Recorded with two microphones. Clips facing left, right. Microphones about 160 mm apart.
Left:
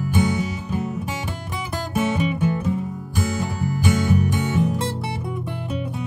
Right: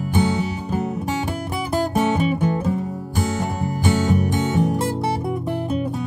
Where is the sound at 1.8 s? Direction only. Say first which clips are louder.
Right 1 dB; 35° right (ahead or behind).